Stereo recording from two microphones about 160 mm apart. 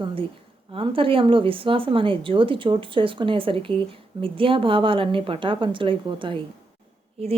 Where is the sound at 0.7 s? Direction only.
35° right (ahead or behind).